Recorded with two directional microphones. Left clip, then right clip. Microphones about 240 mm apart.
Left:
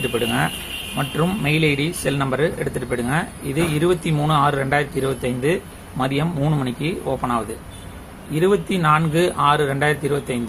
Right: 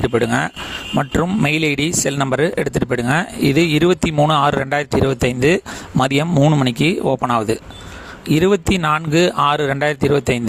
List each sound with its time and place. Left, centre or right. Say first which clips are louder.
0.1 s speech: right 4 dB; right